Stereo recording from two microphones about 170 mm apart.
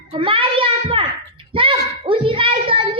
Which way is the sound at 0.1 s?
30° right (ahead or behind).